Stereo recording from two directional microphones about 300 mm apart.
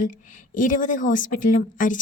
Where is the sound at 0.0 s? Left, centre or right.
Left.